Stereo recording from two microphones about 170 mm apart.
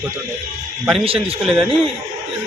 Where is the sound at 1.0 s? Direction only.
35° right (ahead or behind).